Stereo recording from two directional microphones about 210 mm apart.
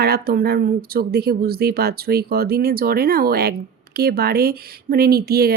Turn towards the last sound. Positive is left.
turn(degrees=-50)  # may be behind; listen again after turning